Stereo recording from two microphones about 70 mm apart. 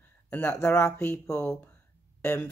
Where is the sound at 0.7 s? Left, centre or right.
Left.